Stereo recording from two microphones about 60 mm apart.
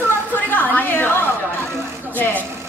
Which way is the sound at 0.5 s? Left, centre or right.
Left.